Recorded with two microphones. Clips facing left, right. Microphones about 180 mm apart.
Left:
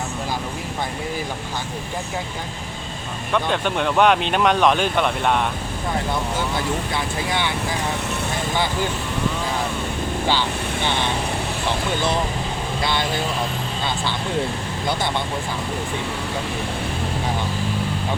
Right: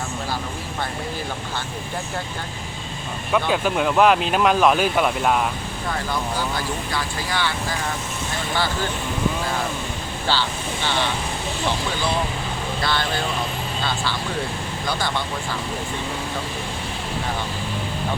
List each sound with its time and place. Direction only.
3.3 s speech: 5° right (ahead or behind)
6.9 s speech: 20° left (ahead or behind)
12.8 s speech: 20° left (ahead or behind)